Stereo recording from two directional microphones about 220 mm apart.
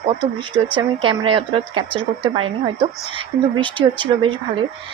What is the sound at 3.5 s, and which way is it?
Speech, 20° right (ahead or behind).